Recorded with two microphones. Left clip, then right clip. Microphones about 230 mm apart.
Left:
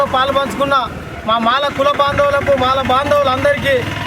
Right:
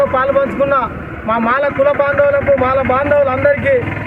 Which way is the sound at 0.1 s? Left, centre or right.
Centre.